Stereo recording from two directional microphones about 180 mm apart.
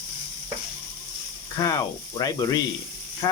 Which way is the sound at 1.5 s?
20° left (ahead or behind).